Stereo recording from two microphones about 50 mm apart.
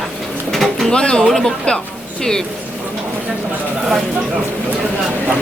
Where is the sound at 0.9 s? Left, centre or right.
Centre.